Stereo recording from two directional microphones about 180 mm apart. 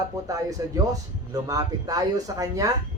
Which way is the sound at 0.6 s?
20° right (ahead or behind).